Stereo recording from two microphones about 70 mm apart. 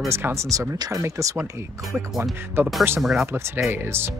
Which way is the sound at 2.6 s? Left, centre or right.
Right.